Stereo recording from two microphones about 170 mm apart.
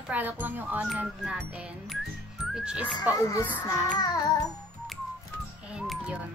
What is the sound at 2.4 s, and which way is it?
Music, 5° right (ahead or behind).